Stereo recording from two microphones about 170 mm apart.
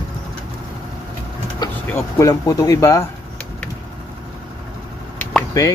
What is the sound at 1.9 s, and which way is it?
Speech, 20° left (ahead or behind).